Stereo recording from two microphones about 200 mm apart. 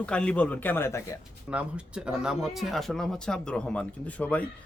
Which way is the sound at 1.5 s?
5° right (ahead or behind).